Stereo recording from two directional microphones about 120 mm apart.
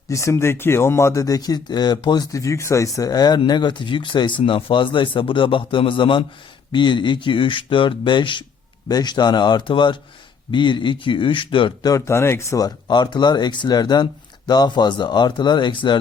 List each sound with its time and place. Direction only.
0.1 s speech: 25° left (ahead or behind); by 11.9 s 45° left (ahead or behind)
11.9 s speech: 25° left (ahead or behind); by 16.0 s 40° left (ahead or behind)